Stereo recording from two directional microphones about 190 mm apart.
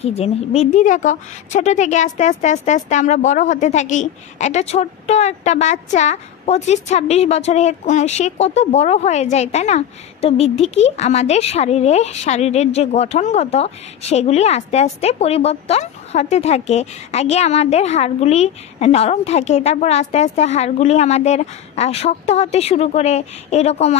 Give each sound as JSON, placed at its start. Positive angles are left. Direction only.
{"t": 0.0, "sound": "speech", "side_deg": 35}